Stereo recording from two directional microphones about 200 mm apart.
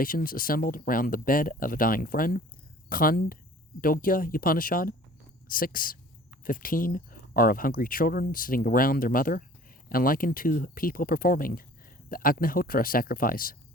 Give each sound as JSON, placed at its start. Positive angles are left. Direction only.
{"t": 0.0, "sound": "speech", "side_deg": 45}